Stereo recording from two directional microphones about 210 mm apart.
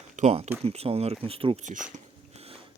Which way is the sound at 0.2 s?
30° right (ahead or behind).